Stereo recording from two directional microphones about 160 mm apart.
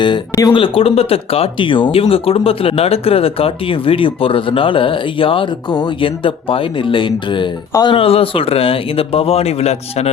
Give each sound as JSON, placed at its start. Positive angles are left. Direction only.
{"t": 0.3, "sound": "speech", "side_deg": 30}